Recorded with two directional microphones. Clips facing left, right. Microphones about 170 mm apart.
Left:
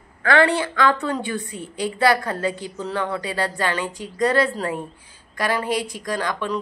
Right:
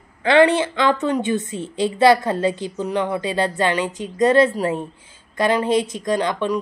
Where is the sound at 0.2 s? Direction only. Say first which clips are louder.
Right 4 dB; 20° right (ahead or behind).